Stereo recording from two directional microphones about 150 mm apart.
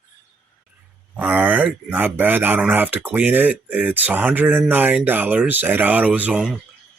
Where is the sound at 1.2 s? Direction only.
10° right (ahead or behind).